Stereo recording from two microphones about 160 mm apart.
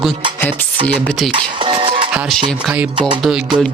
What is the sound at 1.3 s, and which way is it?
Speech, 30° right (ahead or behind).